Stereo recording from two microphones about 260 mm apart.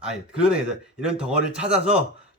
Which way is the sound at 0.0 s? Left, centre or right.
Centre.